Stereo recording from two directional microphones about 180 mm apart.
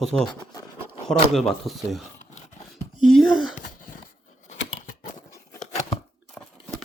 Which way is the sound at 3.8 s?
45° left (ahead or behind).